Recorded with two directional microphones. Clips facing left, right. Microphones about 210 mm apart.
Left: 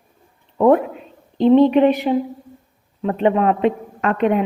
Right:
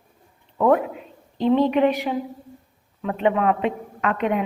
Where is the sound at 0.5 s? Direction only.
30° left (ahead or behind).